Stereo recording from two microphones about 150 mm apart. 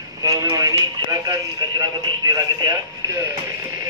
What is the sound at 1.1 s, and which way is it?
Radio, 25° right (ahead or behind).